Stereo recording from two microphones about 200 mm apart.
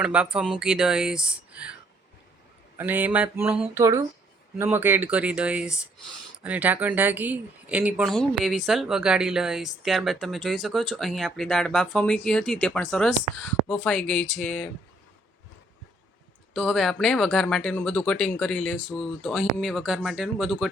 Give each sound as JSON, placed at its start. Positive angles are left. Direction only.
{"t": 0.0, "sound": "speech", "side_deg": -5}
{"t": 2.7, "sound": "speech", "side_deg": -10}
{"t": 16.6, "sound": "speech", "side_deg": 0}